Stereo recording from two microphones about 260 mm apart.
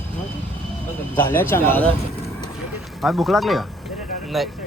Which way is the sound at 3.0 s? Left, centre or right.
Centre.